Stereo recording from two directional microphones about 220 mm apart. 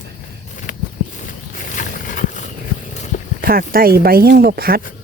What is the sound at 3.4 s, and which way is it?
Speech, 40° right (ahead or behind).